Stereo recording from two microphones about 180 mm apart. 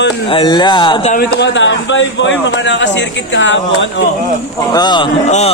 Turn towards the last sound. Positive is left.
turn(degrees=35)  # may be behind; listen again after turning